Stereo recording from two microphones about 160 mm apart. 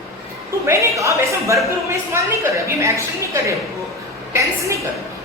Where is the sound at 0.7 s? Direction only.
20° right (ahead or behind).